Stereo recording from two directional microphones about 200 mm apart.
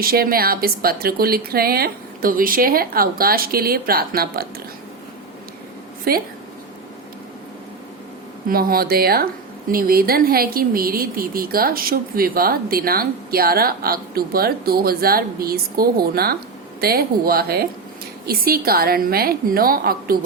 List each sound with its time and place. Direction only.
0.0 s speech: 50° right (ahead or behind)
6.1 s speech: 50° right (ahead or behind)
8.4 s speech: 45° right (ahead or behind)